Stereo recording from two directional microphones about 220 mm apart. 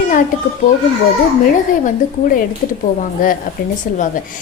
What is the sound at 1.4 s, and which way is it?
A woman's voice, 40° left (ahead or behind).